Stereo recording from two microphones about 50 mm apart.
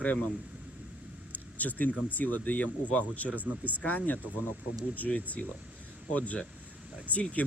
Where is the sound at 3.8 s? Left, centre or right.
Left.